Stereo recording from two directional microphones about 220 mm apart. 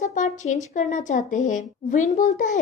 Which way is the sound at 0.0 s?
35° left (ahead or behind).